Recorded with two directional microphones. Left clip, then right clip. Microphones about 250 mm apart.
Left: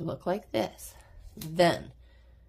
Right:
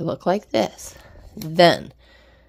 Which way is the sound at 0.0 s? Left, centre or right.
Right.